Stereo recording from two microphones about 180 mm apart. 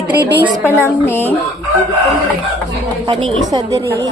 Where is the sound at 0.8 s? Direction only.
10° left (ahead or behind).